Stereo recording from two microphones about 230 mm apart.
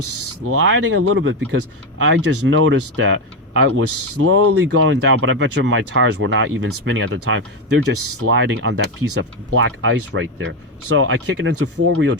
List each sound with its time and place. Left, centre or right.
0.4 s speech: right